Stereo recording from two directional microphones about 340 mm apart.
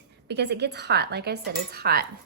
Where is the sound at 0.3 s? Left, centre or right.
Right.